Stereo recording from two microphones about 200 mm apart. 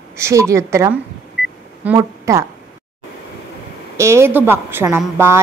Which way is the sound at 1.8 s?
15° right (ahead or behind).